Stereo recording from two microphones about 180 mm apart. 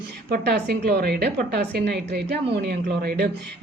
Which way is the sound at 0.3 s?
60° right (ahead or behind).